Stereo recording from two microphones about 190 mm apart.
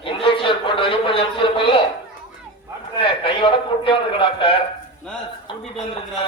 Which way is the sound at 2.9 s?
30° left (ahead or behind).